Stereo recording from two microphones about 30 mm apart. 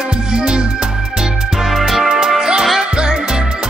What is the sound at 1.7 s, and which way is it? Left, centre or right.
Music, centre.